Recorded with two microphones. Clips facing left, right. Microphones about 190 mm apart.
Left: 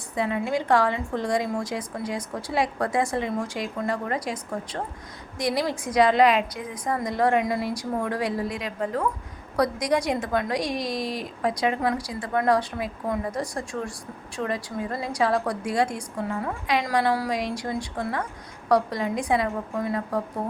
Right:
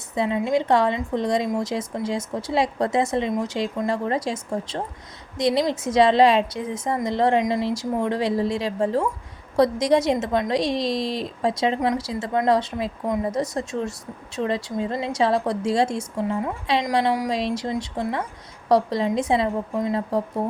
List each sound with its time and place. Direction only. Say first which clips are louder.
0.2 s a woman's voice: right 4 dB; 20° right (ahead or behind)